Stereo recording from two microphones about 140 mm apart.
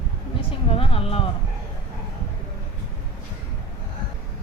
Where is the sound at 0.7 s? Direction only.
40° left (ahead or behind).